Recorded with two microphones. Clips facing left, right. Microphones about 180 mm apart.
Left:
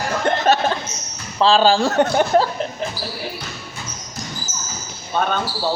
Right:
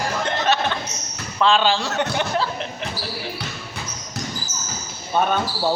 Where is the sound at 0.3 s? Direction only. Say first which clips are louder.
Left 6 dB; 45° left (ahead or behind).